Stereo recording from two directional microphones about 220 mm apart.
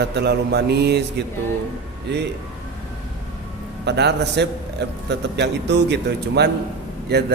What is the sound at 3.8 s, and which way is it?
A man's voice, 50° right (ahead or behind).